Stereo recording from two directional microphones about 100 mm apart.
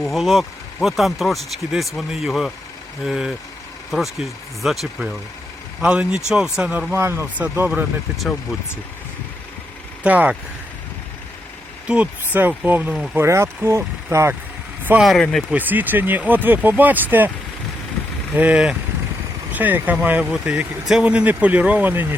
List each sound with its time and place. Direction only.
0.0 s speech: centre (ahead or behind)
6.9 s speech: 25° right (ahead or behind)
10.0 s speech: 15° right (ahead or behind)
11.9 s speech: 15° right (ahead or behind)
15.2 s speech: 5° left (ahead or behind)
15.4 s speech: 15° right (ahead or behind)
18.3 s speech: 10° right (ahead or behind)